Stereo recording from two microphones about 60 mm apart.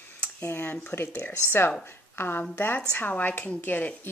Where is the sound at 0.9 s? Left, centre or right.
Left.